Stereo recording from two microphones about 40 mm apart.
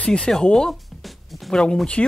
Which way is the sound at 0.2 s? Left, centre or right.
Centre.